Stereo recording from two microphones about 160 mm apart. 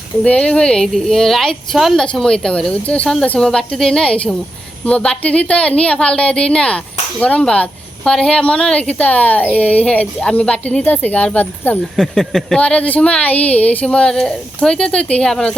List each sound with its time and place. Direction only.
0.3 s a woman's voice: 5° left (ahead or behind)
13.3 s speech: 40° left (ahead or behind)
13.7 s a woman's voice: 5° left (ahead or behind)